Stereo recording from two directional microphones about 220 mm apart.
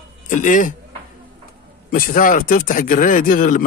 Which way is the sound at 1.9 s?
40° left (ahead or behind).